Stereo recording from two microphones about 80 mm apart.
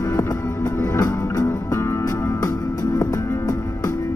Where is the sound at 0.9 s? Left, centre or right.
Left.